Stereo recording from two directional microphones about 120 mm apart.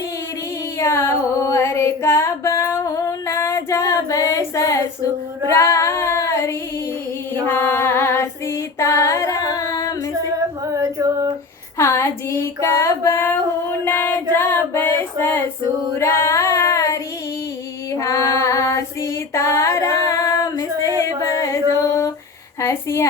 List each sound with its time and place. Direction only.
0.8 s music: 25° left (ahead or behind)
1.5 s female singing: 25° left (ahead or behind)
10.8 s singing: 30° right (ahead or behind)
11.8 s a sound: 20° left (ahead or behind)
13.8 s female singing: 15° left (ahead or behind)
17.9 s child singing: 25° left (ahead or behind)
21.4 s music: 25° left (ahead or behind)
22.6 s a woman's voice: 25° left (ahead or behind)